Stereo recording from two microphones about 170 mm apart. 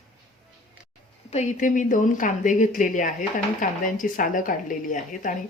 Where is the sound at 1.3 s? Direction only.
45° left (ahead or behind).